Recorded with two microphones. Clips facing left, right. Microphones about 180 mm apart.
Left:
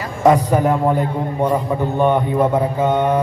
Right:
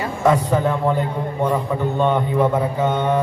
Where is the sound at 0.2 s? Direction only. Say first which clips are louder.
Left 4 dB; 20° left (ahead or behind).